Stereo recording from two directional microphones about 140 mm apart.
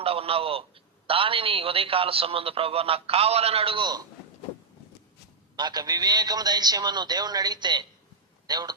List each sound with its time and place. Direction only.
0.0 s telephone: 45° right (ahead or behind)
1.0 s a man's voice: 40° right (ahead or behind)
5.5 s a man's voice: 30° right (ahead or behind)